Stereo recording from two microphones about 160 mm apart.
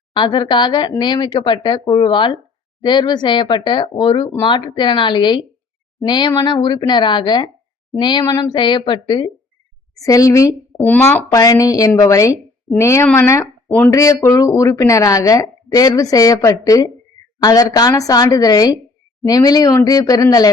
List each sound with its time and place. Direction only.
0.1 s a woman's voice: 30° left (ahead or behind)